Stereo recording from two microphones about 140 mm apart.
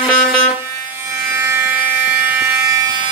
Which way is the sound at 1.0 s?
15° right (ahead or behind).